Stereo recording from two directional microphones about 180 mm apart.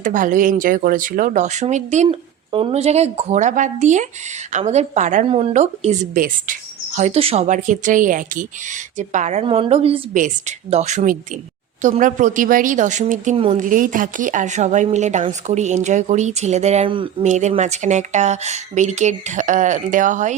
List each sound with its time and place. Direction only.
0.0 s speech: 45° right (ahead or behind)
10.2 s speech: 45° right (ahead or behind)
13.3 s speech: 30° right (ahead or behind)
13.6 s speech: 50° right (ahead or behind); by 17.1 s 30° right (ahead or behind)
17.2 s speech: 40° right (ahead or behind)